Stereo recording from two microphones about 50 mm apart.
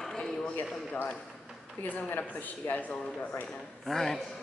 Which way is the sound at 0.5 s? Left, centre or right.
Left.